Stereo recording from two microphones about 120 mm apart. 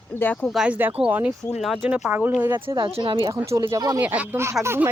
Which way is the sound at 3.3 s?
25° right (ahead or behind).